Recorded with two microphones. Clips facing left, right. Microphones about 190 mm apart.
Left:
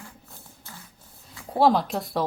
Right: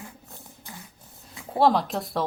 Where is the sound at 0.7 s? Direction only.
15° right (ahead or behind).